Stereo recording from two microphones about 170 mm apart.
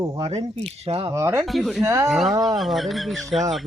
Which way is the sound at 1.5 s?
Centre (ahead or behind).